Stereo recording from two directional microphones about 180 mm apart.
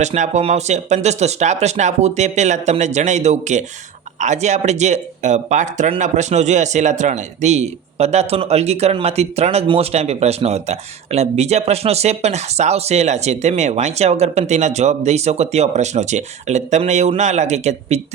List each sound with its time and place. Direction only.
0.0 s speech: 40° right (ahead or behind)